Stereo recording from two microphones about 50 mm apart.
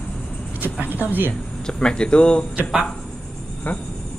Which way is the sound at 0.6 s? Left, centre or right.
Right.